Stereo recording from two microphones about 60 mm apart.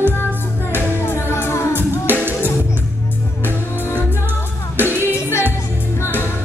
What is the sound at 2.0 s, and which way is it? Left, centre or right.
Music, right.